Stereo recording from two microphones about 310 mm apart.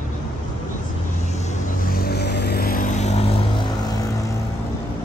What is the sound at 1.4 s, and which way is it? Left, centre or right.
Vehicle, left.